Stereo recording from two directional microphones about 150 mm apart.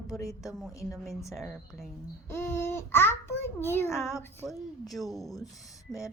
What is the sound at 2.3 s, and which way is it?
Child singing, 15° left (ahead or behind).